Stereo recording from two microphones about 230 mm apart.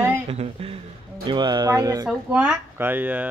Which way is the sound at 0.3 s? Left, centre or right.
Right.